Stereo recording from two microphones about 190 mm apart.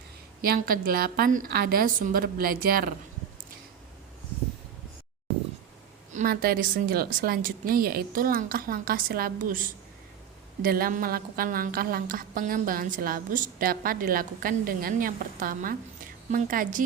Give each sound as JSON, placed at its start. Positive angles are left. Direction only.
{"t": 0.4, "sound": "a woman's voice", "side_deg": -50}
{"t": 6.1, "sound": "a woman's voice", "side_deg": -50}